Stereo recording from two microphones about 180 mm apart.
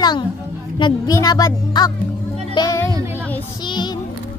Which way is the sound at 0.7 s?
25° left (ahead or behind).